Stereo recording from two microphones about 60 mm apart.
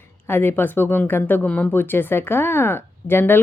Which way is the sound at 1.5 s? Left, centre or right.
Left.